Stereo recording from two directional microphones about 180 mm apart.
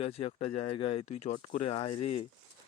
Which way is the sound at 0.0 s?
35° left (ahead or behind).